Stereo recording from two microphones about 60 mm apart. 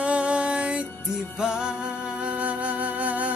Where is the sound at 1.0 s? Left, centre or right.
Centre.